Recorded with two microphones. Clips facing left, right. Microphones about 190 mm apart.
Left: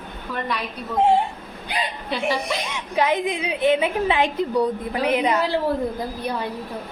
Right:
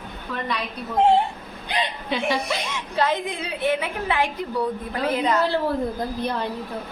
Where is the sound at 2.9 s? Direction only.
15° left (ahead or behind).